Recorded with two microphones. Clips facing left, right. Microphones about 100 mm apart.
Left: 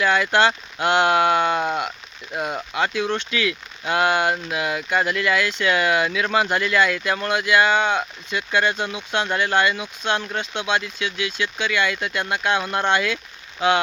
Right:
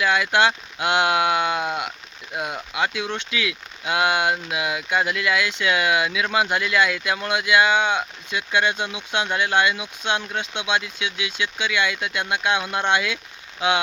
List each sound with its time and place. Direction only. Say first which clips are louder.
0.0 s speech: left 1 dB; 10° right (ahead or behind)